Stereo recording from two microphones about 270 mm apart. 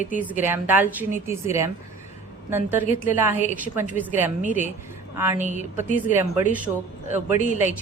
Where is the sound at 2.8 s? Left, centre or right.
Left.